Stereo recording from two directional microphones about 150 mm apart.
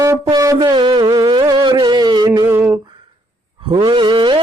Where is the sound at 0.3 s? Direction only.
20° right (ahead or behind).